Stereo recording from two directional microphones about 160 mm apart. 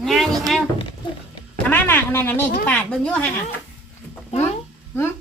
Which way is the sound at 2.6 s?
10° left (ahead or behind).